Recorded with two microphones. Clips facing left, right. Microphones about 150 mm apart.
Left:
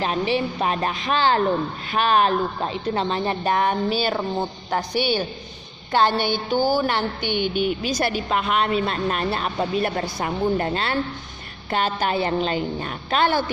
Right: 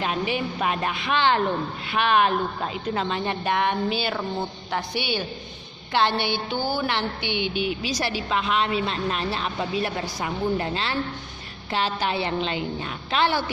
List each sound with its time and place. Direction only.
0.0 s a woman's voice: 35° left (ahead or behind)